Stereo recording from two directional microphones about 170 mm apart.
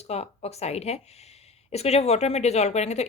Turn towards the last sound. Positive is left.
turn(degrees=40)  # may be behind; listen again after turning